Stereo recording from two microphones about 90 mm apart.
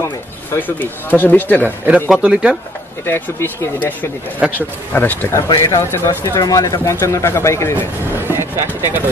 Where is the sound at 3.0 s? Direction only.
25° left (ahead or behind).